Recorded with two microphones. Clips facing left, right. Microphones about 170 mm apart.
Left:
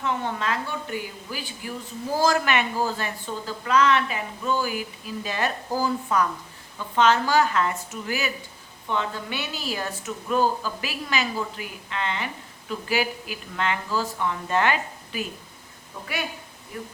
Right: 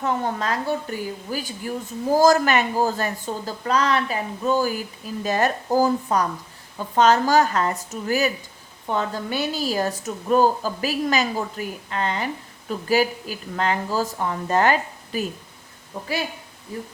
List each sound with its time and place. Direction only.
0.0 s a woman's voice: 40° right (ahead or behind)
16.7 s speech: 30° right (ahead or behind)